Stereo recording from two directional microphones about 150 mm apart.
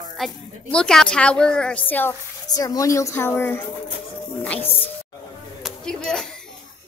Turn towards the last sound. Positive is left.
turn(degrees=5)  # may be behind; listen again after turning